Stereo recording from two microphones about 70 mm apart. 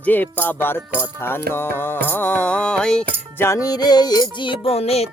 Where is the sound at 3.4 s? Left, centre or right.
Left.